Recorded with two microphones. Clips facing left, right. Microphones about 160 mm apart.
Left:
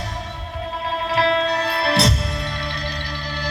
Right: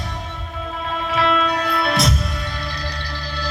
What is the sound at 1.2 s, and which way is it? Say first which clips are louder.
Music: even; 30° left (ahead or behind).